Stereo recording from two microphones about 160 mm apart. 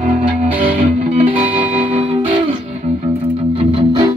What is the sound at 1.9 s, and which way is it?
Music, 35° right (ahead or behind).